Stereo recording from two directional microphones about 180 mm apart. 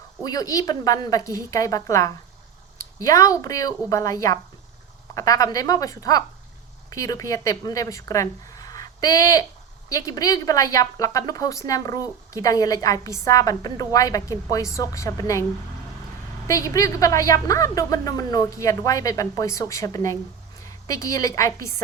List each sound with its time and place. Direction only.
0.3 s a woman's voice: 20° left (ahead or behind)
16.5 s a woman's voice: 20° left (ahead or behind)